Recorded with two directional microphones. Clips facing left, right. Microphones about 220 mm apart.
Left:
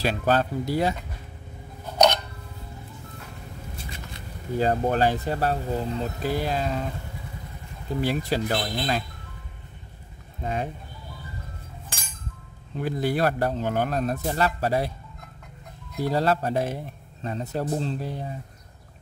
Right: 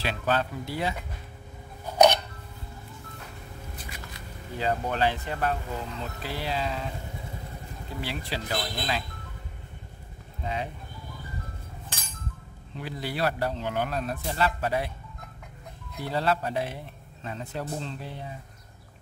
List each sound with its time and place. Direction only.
0.0 s a man's voice: 40° left (ahead or behind)
4.6 s speech: 45° left (ahead or behind)
8.0 s speech: 45° left (ahead or behind)
10.4 s speech: 50° left (ahead or behind)
12.7 s speech: 45° left (ahead or behind)
16.1 s a man's voice: 40° left (ahead or behind)